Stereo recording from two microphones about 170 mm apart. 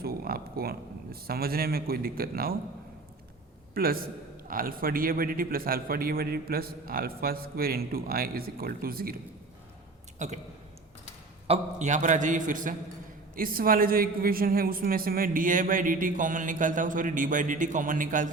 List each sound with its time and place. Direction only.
0.0 s speech: 60° right (ahead or behind)
3.8 s a man's voice: 60° right (ahead or behind)
10.2 s speech: 40° right (ahead or behind)
11.4 s a woman's voice: 40° right (ahead or behind)